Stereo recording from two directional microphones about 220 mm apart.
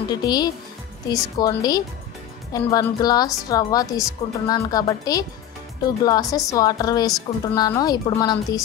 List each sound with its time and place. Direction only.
0.1 s a woman's voice: 20° left (ahead or behind)